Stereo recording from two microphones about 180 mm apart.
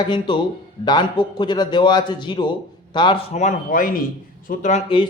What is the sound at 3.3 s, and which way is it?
Speech, 40° left (ahead or behind).